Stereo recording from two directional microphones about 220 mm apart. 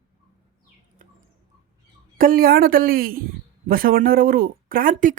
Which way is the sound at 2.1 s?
40° right (ahead or behind).